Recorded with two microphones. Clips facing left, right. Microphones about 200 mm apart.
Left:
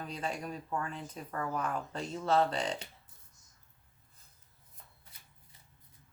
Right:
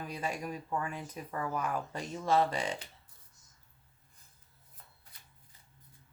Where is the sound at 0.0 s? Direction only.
10° right (ahead or behind).